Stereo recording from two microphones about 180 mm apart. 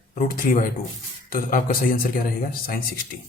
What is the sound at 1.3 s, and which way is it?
Speech, 50° left (ahead or behind).